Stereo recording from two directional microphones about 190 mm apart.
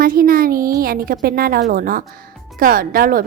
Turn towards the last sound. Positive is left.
turn(degrees=-50)  # may be behind; listen again after turning